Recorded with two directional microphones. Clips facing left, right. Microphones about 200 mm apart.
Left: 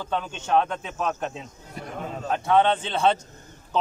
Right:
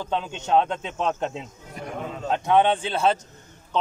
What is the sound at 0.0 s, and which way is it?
A man's voice, 20° right (ahead or behind).